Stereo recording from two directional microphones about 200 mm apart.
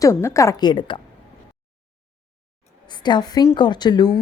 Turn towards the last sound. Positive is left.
turn(degrees=20)  # may be behind; listen again after turning